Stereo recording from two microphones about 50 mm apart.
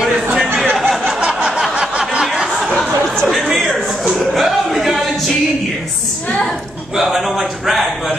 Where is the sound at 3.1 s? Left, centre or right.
Centre.